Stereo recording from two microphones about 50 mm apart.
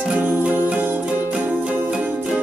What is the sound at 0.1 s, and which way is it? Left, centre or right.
Music, right.